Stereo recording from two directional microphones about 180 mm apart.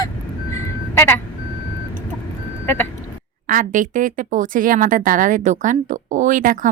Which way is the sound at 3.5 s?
45° right (ahead or behind).